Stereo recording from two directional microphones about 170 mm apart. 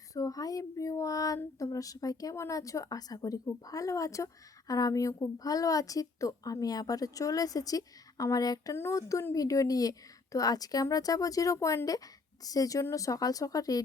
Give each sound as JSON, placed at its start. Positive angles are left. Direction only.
{"t": 0.1, "sound": "a woman's voice", "side_deg": 20}